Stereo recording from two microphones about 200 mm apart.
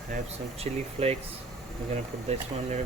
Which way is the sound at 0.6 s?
30° right (ahead or behind).